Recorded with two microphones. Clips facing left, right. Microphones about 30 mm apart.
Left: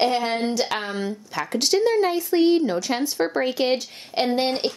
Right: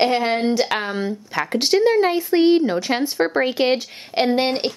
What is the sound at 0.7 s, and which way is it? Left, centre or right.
Speech, right.